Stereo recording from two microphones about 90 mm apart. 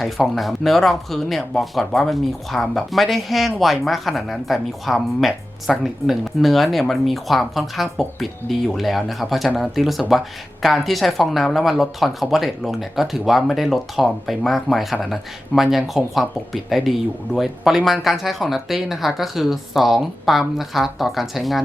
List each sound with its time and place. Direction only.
0.3 s speech: centre (ahead or behind)